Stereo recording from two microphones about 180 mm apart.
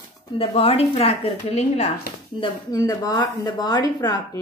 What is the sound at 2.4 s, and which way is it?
A woman's voice, 20° left (ahead or behind).